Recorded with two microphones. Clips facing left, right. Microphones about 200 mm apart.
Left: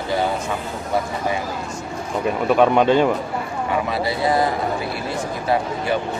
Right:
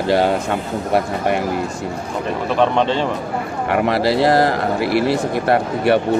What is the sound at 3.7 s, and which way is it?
Speech, 75° right (ahead or behind).